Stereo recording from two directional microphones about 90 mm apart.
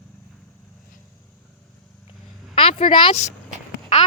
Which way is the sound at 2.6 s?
85° left.